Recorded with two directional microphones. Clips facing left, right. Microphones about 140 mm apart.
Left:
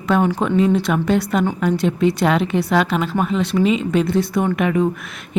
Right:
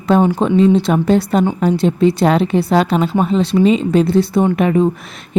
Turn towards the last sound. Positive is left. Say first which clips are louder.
# right 4 dB
turn(degrees=-30)  # may be behind; listen again after turning